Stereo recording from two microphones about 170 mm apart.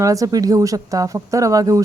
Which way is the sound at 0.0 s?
20° right (ahead or behind).